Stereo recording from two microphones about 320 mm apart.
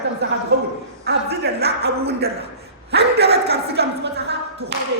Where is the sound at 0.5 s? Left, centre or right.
Right.